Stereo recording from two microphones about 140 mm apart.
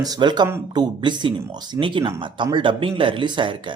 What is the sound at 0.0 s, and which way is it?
A man's voice, 30° right (ahead or behind).